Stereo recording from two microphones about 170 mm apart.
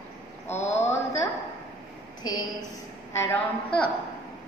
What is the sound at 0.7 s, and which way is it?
Speech, 15° left (ahead or behind).